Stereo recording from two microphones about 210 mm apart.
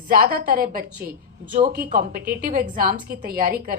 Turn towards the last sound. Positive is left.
turn(degrees=-45)  # may be behind; listen again after turning